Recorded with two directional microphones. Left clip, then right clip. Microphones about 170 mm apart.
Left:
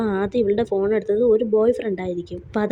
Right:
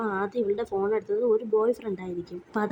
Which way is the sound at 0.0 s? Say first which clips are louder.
Left 6 dB; 20° left (ahead or behind).